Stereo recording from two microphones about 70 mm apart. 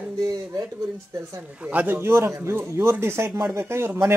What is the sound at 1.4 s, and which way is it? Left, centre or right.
Speech, right.